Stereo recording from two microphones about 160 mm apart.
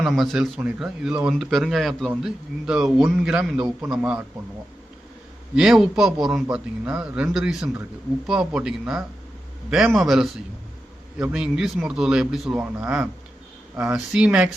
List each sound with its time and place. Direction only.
0.0 s speech: centre (ahead or behind)
5.5 s speech: 5° right (ahead or behind)